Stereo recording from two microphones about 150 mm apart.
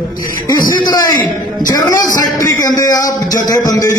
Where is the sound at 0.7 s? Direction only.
30° left (ahead or behind).